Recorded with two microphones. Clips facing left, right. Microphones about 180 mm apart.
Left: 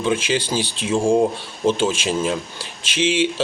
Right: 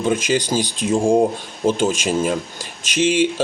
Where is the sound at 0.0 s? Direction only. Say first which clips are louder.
Right 2 dB; 45° right (ahead or behind).